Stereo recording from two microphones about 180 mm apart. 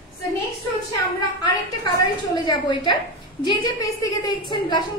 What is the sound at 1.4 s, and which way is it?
A woman's voice, 20° left (ahead or behind).